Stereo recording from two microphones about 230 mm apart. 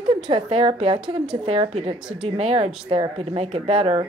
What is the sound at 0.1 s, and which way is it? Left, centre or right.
A woman's voice, right.